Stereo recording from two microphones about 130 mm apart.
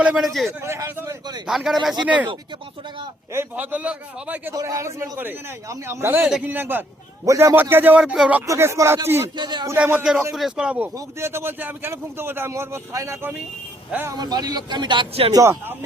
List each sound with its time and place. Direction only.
0.0 s speech: 5° right (ahead or behind)
0.6 s a man's voice: 20° right (ahead or behind)
1.5 s speech: centre (ahead or behind)
3.3 s a man's voice: 10° right (ahead or behind)
4.5 s a man's voice: 25° right (ahead or behind); by 8.4 s 5° right (ahead or behind)
8.4 s a man's voice: 20° right (ahead or behind)
9.3 s speech: 35° right (ahead or behind)
9.7 s a man's voice: 10° right (ahead or behind)
14.2 s speech: 30° right (ahead or behind)
15.3 s a man's voice: 20° right (ahead or behind)